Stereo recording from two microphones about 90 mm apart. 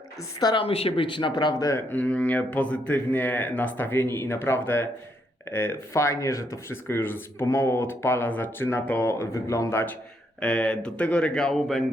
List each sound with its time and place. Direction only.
0.2 s a woman's voice: 45° left (ahead or behind)
0.5 s speech: 90° left; by 1.6 s 55° left (ahead or behind)
1.9 s speech: 15° left (ahead or behind)
10.4 s speech: 10° left (ahead or behind)